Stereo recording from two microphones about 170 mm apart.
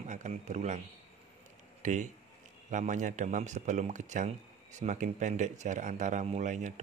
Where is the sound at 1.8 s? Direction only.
45° right (ahead or behind).